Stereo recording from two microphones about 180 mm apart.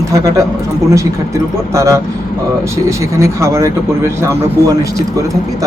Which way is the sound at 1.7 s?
15° right (ahead or behind).